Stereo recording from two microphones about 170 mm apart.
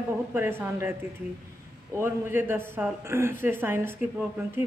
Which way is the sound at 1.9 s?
15° right (ahead or behind).